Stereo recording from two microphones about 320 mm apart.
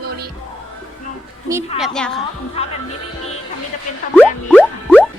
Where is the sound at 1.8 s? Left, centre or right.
Centre.